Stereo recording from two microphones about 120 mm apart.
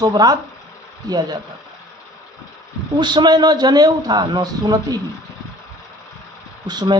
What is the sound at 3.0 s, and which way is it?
Speech, 35° right (ahead or behind).